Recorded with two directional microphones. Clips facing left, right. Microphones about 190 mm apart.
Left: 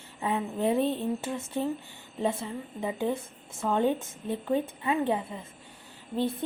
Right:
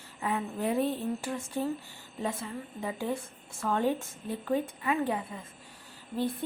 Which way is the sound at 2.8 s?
20° left (ahead or behind).